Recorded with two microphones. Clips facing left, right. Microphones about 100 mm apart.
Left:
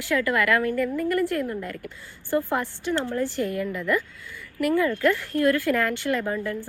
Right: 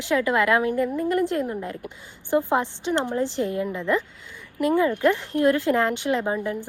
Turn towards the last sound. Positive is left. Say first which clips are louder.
# right 2 dB
turn(degrees=-20)  # may be behind; listen again after turning